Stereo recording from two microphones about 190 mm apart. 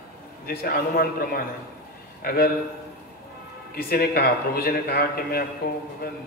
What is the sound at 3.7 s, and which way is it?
A man's voice, 50° left (ahead or behind).